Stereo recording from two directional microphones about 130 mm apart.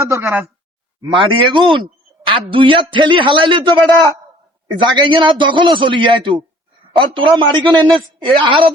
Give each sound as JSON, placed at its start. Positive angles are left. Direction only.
{"t": 0.1, "sound": "speech", "side_deg": -20}
{"t": 1.1, "sound": "a man's voice", "side_deg": -40}
{"t": 4.8, "sound": "a man's voice", "side_deg": -40}